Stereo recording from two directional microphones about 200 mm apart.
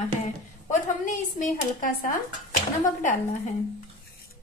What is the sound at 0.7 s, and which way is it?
A woman's voice, 40° left (ahead or behind).